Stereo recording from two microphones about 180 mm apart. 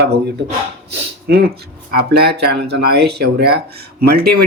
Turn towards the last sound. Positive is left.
turn(degrees=-60)  # may be behind; listen again after turning